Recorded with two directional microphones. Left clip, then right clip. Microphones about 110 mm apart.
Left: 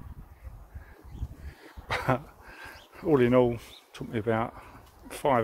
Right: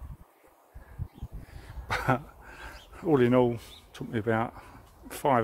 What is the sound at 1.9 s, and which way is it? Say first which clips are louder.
Speech: even; 35° right (ahead or behind).